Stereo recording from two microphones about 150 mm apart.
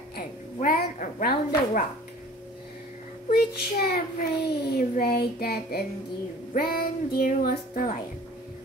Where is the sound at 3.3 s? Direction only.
90° left.